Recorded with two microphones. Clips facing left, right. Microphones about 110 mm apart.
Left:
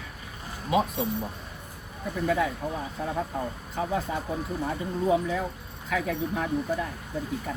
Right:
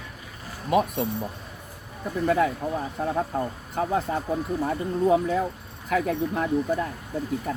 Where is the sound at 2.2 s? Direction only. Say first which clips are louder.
Right 4 dB; 50° right (ahead or behind).